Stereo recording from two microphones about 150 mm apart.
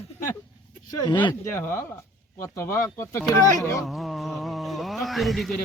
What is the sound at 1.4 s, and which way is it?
Speech, 15° left (ahead or behind).